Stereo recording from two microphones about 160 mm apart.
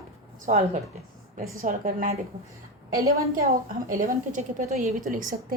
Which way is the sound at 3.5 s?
60° right (ahead or behind).